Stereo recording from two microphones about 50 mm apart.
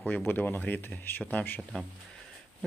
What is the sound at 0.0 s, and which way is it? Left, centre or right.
Speech, left.